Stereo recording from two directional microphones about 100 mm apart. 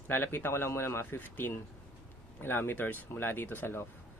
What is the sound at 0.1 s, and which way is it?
Speech, 20° left (ahead or behind).